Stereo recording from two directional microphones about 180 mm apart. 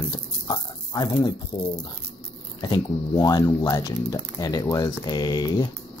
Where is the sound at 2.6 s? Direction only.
20° left (ahead or behind).